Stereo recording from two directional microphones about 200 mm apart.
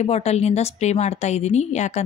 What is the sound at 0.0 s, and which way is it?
A woman's voice, 30° left (ahead or behind).